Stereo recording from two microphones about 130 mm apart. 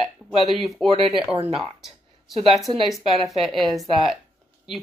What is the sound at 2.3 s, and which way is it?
Speech, centre (ahead or behind).